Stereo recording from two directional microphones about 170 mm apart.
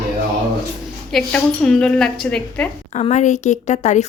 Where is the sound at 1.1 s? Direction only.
5° left (ahead or behind).